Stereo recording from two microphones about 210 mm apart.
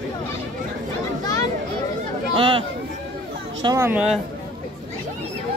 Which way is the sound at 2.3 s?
25° right (ahead or behind).